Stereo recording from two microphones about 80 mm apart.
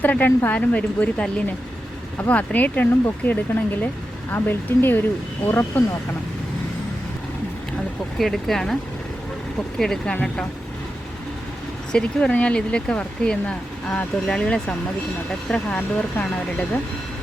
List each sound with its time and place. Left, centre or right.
0.0 s speech: left
8.2 s speech: centre
11.9 s speech: centre